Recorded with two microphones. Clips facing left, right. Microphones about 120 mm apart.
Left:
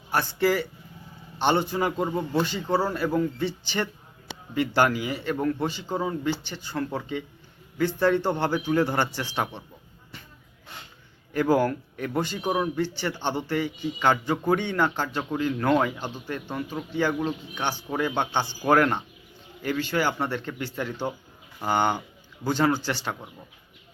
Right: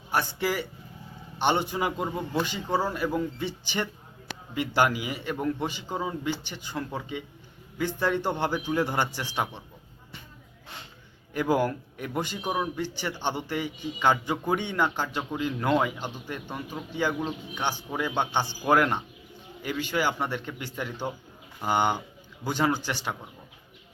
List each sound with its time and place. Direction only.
0.1 s a man's voice: 15° right (ahead or behind)
11.3 s a man's voice: 15° right (ahead or behind)